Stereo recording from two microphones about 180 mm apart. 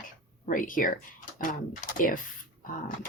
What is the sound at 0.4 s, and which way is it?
Speech, 45° left (ahead or behind).